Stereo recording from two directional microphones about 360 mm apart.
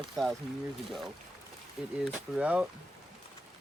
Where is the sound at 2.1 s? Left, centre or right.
Centre.